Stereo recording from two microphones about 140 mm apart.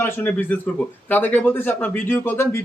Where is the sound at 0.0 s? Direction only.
15° left (ahead or behind).